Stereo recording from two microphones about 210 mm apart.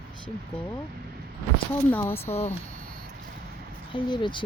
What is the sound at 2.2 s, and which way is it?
Speech, 30° left (ahead or behind).